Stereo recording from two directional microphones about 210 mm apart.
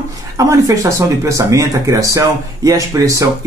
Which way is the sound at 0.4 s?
15° right (ahead or behind).